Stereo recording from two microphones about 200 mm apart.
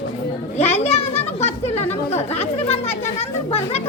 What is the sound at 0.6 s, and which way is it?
Speech, 35° left (ahead or behind).